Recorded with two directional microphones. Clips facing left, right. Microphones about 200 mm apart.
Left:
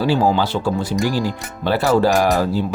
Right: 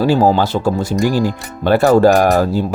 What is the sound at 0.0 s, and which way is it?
Speech, 40° right (ahead or behind).